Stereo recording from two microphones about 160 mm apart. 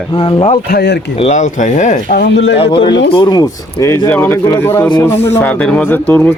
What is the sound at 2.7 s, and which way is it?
Speech, 30° left (ahead or behind).